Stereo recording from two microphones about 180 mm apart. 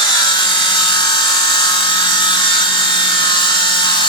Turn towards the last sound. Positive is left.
turn(degrees=25)  # may be behind; listen again after turning